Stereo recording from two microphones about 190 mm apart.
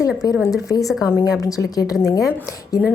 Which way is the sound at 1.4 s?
15° left (ahead or behind).